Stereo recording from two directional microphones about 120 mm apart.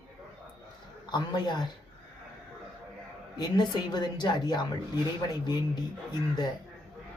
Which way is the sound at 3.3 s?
35° left (ahead or behind).